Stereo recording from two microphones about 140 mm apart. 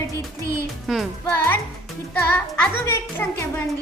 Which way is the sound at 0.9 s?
Centre (ahead or behind).